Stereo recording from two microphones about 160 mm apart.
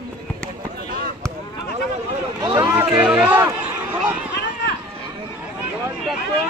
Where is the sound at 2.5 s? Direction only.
30° right (ahead or behind).